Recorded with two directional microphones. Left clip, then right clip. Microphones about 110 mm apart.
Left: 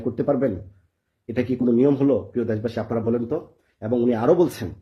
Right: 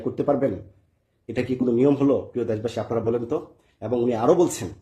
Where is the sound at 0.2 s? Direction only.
25° right (ahead or behind).